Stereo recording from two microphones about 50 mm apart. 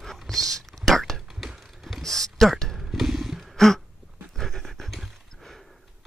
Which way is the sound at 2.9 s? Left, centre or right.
Centre.